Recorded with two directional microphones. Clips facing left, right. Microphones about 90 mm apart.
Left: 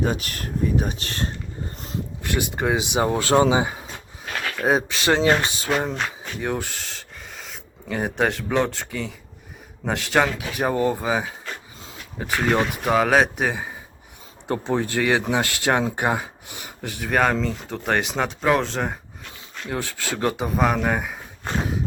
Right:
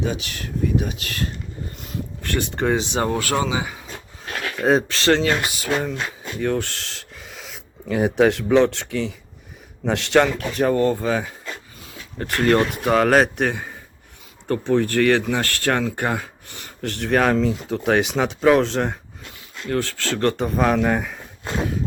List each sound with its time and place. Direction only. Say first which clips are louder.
0.0 s speech: left 1 dB; 45° left (ahead or behind)
2.2 s speech: right 2 dB; 15° left (ahead or behind); by 3.8 s 30° left (ahead or behind)
4.6 s speech: right 3 dB; 10° left (ahead or behind); by 6.0 s 35° left (ahead or behind)
6.4 s speech: right 4 dB; 15° left (ahead or behind)
6.7 s speech: even; centre (ahead or behind)
14.4 s speech: right 4 dB; 15° left (ahead or behind); by 18.9 s centre (ahead or behind)
19.6 s speech: right 5 dB; 15° left (ahead or behind)